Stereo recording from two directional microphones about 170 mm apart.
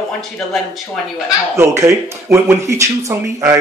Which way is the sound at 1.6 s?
15° right (ahead or behind).